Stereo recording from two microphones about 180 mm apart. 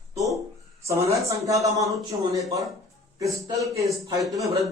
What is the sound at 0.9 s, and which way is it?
Speech, 15° right (ahead or behind).